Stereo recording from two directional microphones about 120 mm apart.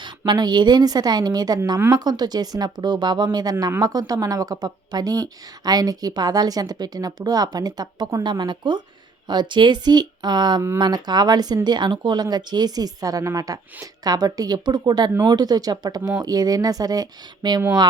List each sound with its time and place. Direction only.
0.0 s a woman's voice: 35° right (ahead or behind)